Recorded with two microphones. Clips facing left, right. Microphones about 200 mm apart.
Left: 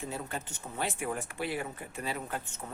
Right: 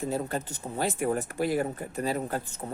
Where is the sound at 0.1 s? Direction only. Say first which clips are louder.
Right 8 dB; 40° right (ahead or behind).